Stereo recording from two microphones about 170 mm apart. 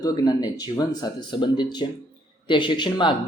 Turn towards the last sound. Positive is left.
turn(degrees=30)  # may be behind; listen again after turning